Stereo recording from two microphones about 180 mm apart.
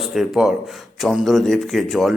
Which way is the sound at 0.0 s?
Centre (ahead or behind).